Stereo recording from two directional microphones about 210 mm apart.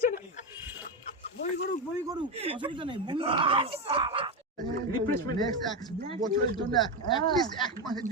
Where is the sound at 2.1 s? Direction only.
25° right (ahead or behind).